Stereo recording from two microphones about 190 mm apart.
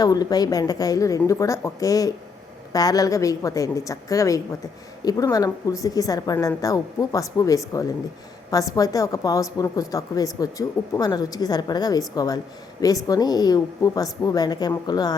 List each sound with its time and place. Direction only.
0.0 s a woman's voice: 20° left (ahead or behind)